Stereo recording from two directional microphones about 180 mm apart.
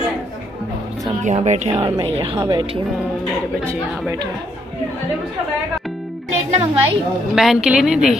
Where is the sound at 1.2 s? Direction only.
40° right (ahead or behind).